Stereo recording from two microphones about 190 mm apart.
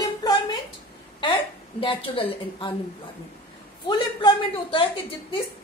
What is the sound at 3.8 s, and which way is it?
A woman's voice, 25° left (ahead or behind).